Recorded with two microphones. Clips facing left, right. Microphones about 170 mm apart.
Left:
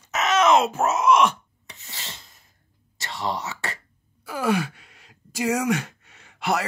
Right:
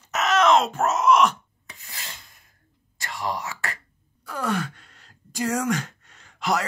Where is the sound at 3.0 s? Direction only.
25° left (ahead or behind).